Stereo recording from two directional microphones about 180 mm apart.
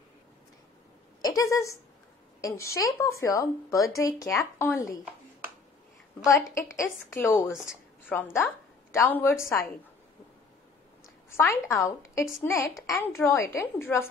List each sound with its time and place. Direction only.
1.2 s a woman's voice: 15° left (ahead or behind)
6.5 s a woman's voice: 15° left (ahead or behind)
9.4 s a woman's voice: centre (ahead or behind)
11.2 s a woman's voice: 15° left (ahead or behind)